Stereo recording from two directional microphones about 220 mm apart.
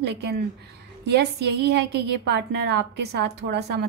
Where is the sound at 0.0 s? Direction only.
50° right (ahead or behind).